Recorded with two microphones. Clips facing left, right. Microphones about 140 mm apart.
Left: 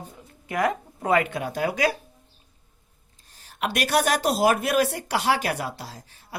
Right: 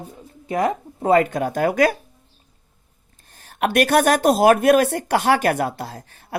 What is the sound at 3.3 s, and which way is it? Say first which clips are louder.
Speech: right 7 dB; 55° right (ahead or behind).